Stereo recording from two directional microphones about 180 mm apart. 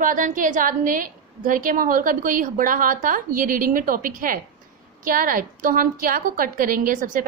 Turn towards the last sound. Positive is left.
turn(degrees=-50)  # may be behind; listen again after turning